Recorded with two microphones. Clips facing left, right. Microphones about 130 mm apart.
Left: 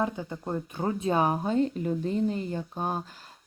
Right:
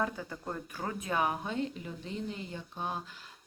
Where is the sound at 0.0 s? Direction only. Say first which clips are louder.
Left 5 dB; 20° left (ahead or behind).